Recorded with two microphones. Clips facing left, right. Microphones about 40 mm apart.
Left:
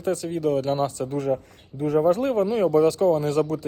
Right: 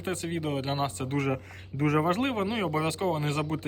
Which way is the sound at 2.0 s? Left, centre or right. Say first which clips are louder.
Left 7 dB; right.